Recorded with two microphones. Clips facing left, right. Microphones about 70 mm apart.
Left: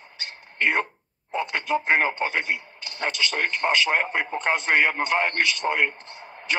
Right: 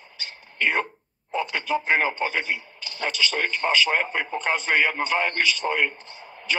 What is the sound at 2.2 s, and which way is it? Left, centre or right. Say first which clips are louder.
A man's voice: even; left.